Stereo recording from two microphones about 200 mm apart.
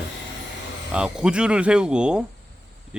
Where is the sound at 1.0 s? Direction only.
5° right (ahead or behind).